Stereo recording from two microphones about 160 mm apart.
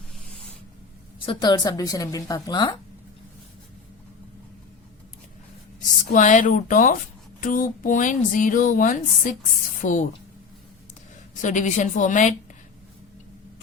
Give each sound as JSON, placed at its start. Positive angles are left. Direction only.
{"t": 1.2, "sound": "a woman's voice", "side_deg": 30}
{"t": 6.1, "sound": "speech", "side_deg": 50}
{"t": 11.3, "sound": "speech", "side_deg": 50}